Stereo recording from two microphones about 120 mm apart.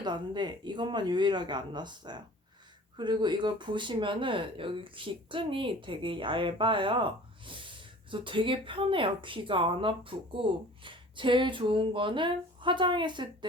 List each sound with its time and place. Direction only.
0.0 s speech: 40° right (ahead or behind)